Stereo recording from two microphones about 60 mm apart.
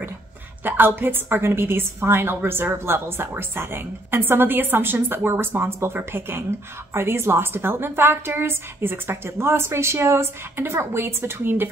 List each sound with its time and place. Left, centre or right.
0.7 s a woman's voice: right